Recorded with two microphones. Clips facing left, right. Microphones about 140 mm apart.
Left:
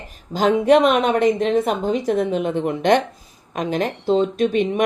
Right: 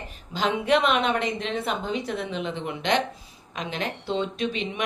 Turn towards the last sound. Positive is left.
turn(degrees=50)  # may be behind; listen again after turning